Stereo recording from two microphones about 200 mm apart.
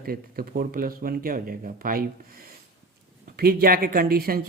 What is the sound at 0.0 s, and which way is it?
Speech, 50° right (ahead or behind).